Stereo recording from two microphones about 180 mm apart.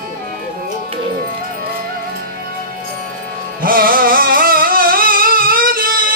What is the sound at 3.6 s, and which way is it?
Music, 50° right (ahead or behind).